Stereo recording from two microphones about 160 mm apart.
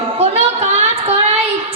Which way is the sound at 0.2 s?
40° right (ahead or behind).